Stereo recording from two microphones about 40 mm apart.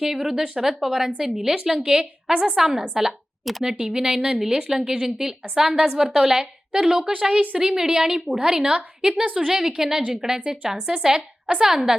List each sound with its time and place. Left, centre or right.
0.0 s a woman's voice: centre
9.3 s a woman's voice: centre